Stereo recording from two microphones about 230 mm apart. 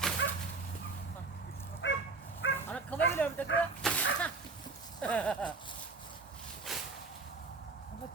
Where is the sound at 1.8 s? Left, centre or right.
Left.